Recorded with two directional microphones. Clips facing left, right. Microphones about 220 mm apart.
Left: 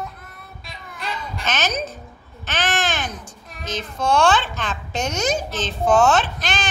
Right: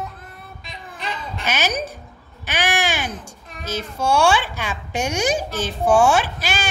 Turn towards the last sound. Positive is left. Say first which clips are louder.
# even
turn(degrees=-10)  # may be behind; listen again after turning